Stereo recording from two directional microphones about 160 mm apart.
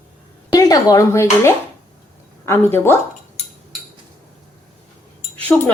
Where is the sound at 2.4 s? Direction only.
15° left (ahead or behind).